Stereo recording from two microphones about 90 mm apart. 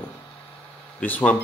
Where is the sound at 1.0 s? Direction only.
20° left (ahead or behind).